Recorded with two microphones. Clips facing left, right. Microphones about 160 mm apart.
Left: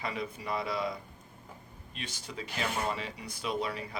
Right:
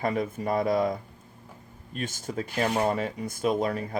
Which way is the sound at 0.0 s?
45° right (ahead or behind).